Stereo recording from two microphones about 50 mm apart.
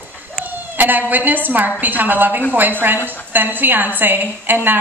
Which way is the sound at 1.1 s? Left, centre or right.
Right.